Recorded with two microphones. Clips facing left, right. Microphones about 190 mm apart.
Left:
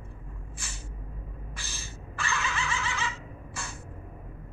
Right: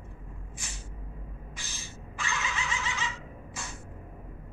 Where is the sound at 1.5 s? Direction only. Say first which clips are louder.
Left 1 dB; 20° right (ahead or behind).